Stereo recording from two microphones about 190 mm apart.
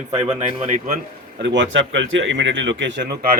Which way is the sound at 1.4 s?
75° right (ahead or behind).